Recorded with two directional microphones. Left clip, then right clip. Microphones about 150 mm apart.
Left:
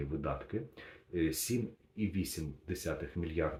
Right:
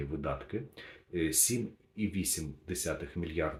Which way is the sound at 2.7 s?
20° right (ahead or behind).